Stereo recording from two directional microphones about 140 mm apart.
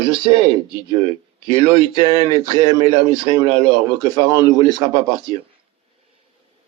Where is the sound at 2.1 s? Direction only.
30° right (ahead or behind).